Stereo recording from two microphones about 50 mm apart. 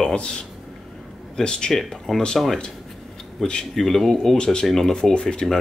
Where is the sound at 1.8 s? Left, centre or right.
Centre.